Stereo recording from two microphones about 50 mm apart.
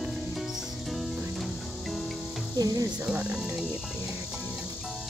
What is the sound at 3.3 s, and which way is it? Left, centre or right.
Music, centre.